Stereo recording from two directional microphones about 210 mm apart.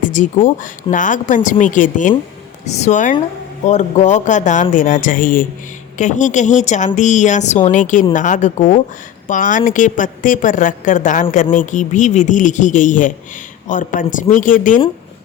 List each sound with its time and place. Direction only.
0.0 s a woman's voice: 35° left (ahead or behind)